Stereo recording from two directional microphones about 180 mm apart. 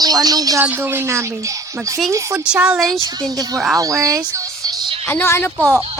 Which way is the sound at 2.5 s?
5° right (ahead or behind).